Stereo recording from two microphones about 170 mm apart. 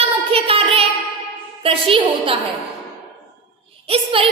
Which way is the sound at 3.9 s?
35° right (ahead or behind).